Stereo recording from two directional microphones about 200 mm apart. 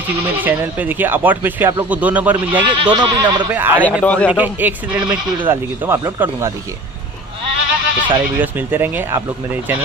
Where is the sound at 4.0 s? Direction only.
5° left (ahead or behind).